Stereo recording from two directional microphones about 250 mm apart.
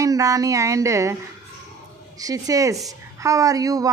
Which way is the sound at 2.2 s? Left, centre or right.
Centre.